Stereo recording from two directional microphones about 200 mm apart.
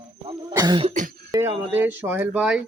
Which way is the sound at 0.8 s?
40° right (ahead or behind).